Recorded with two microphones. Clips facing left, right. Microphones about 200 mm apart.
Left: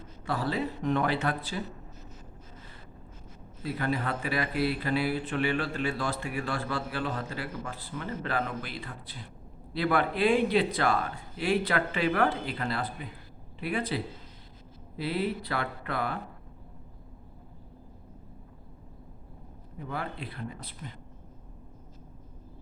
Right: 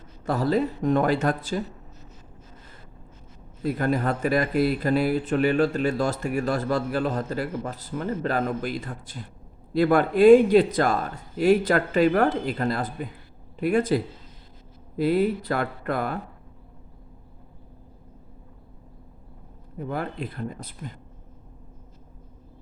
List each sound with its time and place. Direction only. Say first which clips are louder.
0.3 s speech: right 7 dB; 45° right (ahead or behind)
3.6 s speech: right 7 dB; 45° right (ahead or behind)
19.9 s speech: right 6 dB; 45° right (ahead or behind)